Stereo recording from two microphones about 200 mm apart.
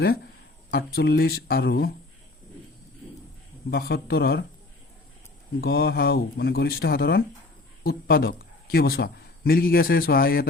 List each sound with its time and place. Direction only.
0.7 s speech: 50° left (ahead or behind)
3.7 s speech: 50° left (ahead or behind)
5.5 s speech: 50° left (ahead or behind)